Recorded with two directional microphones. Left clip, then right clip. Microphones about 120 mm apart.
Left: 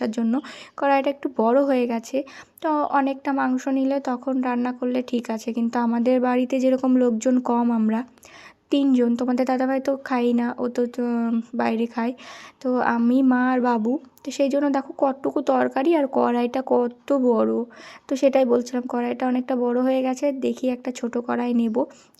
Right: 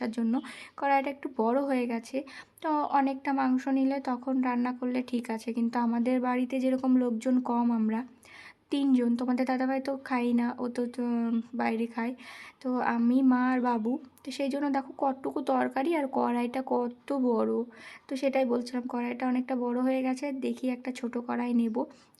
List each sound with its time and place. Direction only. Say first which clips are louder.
0.0 s speech: left 7 dB; 40° left (ahead or behind)
18.1 s speech: left 9 dB; 45° left (ahead or behind)